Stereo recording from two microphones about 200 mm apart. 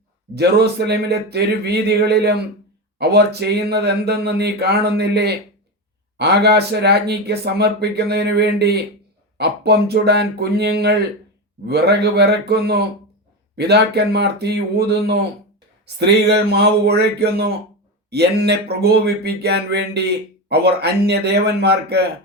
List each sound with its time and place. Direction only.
0.3 s speech: 55° right (ahead or behind)